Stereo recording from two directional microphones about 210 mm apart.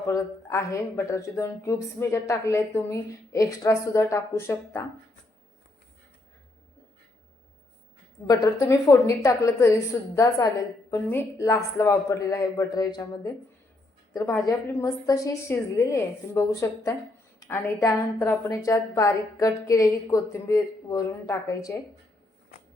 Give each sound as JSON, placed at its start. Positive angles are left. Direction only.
{"t": 0.0, "sound": "speech", "side_deg": 15}
{"t": 8.3, "sound": "speech", "side_deg": 15}
{"t": 10.9, "sound": "speech", "side_deg": 10}